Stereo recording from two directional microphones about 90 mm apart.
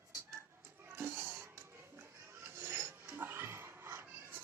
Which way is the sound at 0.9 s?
25° right (ahead or behind).